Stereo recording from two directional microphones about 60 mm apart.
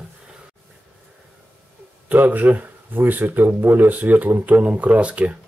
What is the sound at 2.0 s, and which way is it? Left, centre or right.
Speech, right.